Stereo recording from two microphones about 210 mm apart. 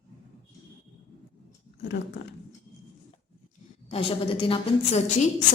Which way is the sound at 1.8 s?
60° left (ahead or behind).